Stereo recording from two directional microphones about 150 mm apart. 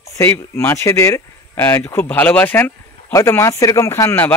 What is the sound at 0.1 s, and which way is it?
Speech, 20° left (ahead or behind).